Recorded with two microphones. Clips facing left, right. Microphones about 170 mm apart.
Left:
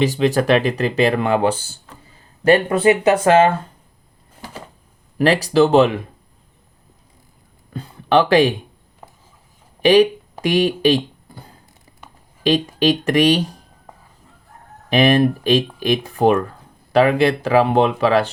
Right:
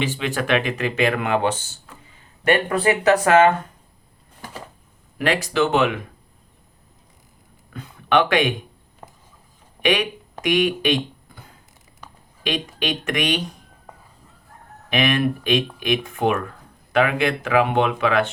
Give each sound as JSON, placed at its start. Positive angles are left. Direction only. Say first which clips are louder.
{"t": 0.0, "sound": "speech", "louder": "left 8 dB", "side_deg": 40}
{"t": 5.1, "sound": "speech", "louder": "left 6 dB", "side_deg": 35}
{"t": 7.7, "sound": "speech", "louder": "left 3 dB", "side_deg": 30}
{"t": 9.8, "sound": "speech", "louder": "left 9 dB", "side_deg": 35}
{"t": 10.4, "sound": "a sound", "louder": "left 4 dB", "side_deg": 35}
{"t": 12.4, "sound": "speech", "louder": "left 9 dB", "side_deg": 35}
{"t": 14.8, "sound": "speech", "louder": "left 6 dB", "side_deg": 35}